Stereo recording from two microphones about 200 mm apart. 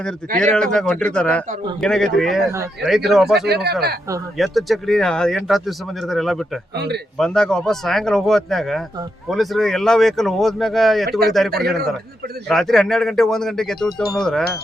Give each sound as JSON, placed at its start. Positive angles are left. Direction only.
{"t": 0.3, "sound": "speech", "side_deg": 5}
{"t": 3.4, "sound": "speech", "side_deg": -55}
{"t": 4.4, "sound": "speech", "side_deg": 0}
{"t": 6.7, "sound": "speech", "side_deg": -55}
{"t": 7.2, "sound": "speech", "side_deg": 5}